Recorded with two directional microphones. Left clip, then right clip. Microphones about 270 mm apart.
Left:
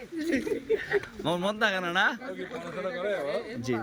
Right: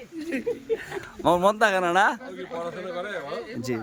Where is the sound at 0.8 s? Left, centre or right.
Centre.